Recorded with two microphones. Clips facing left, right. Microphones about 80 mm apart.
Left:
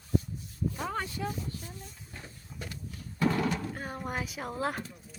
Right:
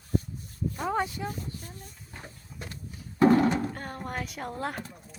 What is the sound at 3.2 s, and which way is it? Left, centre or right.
Horse, right.